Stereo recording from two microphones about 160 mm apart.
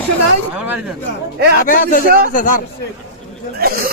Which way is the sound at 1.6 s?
60° left (ahead or behind).